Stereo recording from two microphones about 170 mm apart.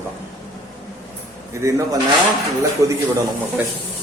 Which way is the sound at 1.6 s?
20° right (ahead or behind).